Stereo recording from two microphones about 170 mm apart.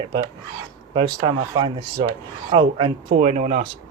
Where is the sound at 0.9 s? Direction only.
30° right (ahead or behind).